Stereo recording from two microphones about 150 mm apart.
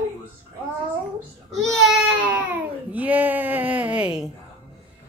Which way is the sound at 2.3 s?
10° right (ahead or behind).